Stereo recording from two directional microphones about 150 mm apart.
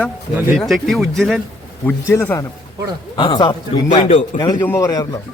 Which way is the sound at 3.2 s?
30° left (ahead or behind).